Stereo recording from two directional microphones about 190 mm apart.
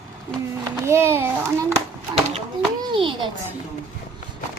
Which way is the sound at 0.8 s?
15° right (ahead or behind).